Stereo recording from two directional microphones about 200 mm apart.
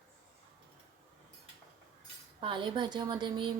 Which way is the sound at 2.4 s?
25° right (ahead or behind).